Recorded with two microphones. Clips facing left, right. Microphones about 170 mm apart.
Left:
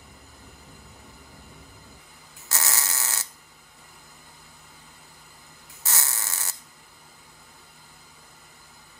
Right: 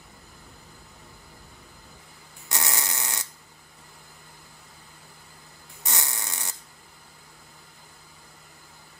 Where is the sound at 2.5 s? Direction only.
15° right (ahead or behind).